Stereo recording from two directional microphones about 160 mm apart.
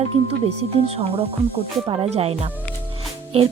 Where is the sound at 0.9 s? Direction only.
40° right (ahead or behind).